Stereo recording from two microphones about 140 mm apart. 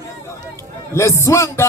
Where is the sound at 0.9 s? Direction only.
20° left (ahead or behind).